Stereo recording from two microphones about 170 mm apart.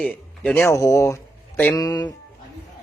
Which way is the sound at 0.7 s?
15° left (ahead or behind).